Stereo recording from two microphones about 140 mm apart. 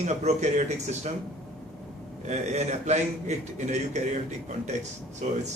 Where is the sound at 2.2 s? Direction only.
55° right (ahead or behind).